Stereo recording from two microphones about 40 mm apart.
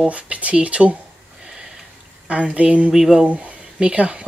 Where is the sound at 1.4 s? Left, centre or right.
Centre.